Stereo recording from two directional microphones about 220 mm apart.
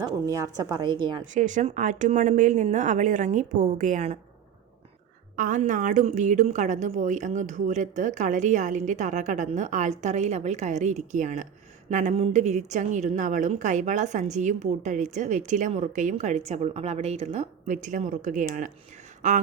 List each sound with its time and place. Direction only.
0.0 s a woman's voice: 15° right (ahead or behind)
1.3 s a woman's voice: 35° right (ahead or behind)
5.4 s a woman's voice: 35° right (ahead or behind)